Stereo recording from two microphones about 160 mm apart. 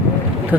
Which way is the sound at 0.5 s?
10° right (ahead or behind).